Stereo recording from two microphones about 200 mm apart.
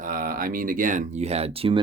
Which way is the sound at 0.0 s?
45° right (ahead or behind).